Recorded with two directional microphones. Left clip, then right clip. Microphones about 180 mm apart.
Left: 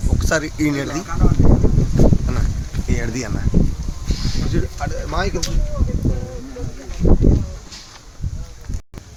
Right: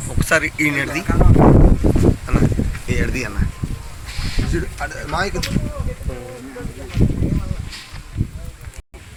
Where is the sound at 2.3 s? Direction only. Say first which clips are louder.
Right 6 dB; 35° left (ahead or behind).